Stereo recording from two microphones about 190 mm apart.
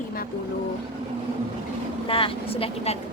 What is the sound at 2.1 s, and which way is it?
Speech, 30° left (ahead or behind).